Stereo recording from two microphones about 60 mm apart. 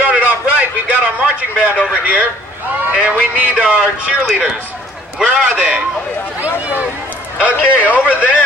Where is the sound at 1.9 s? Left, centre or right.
Right.